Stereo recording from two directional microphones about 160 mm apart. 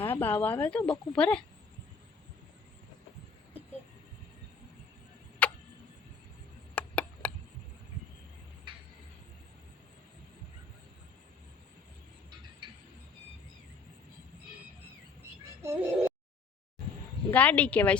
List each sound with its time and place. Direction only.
0.0 s a woman's voice: 15° left (ahead or behind)
5.4 s tick-tock: 10° left (ahead or behind)
6.7 s chop: 10° left (ahead or behind)
12.6 s music: 30° right (ahead or behind)
15.6 s a sound: 15° right (ahead or behind)
17.3 s a woman's voice: 10° left (ahead or behind)